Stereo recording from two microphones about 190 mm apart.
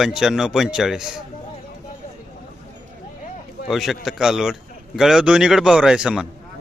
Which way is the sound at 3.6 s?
Centre (ahead or behind).